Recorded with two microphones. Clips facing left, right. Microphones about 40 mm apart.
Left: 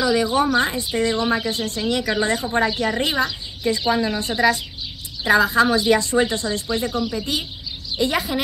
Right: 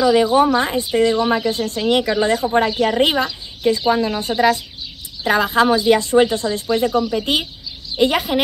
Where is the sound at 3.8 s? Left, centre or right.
Centre.